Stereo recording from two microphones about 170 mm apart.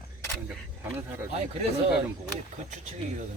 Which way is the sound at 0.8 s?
15° right (ahead or behind).